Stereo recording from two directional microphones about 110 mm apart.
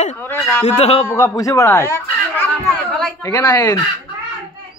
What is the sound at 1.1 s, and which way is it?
Speech, 25° left (ahead or behind).